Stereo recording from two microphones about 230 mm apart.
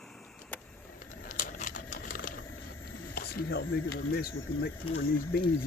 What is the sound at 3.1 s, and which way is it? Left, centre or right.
Speech, left.